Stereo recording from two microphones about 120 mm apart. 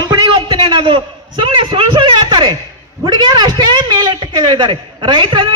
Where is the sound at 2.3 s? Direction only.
30° right (ahead or behind); by 5.5 s 50° right (ahead or behind).